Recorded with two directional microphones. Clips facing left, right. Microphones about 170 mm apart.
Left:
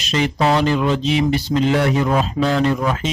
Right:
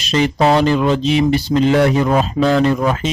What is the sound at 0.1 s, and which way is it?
A man's voice, 40° right (ahead or behind).